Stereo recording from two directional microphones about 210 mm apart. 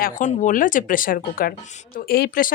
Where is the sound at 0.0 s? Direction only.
35° left (ahead or behind).